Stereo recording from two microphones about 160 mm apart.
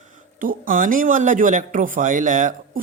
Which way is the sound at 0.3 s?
60° right (ahead or behind).